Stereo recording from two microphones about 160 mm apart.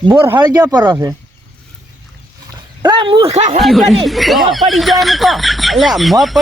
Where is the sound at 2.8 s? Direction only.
30° right (ahead or behind).